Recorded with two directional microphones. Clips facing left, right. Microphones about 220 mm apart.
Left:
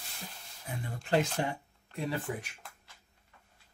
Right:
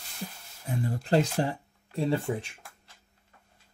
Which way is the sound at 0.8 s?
35° right (ahead or behind).